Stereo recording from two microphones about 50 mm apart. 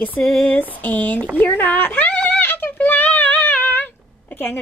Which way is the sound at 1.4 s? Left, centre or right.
Left.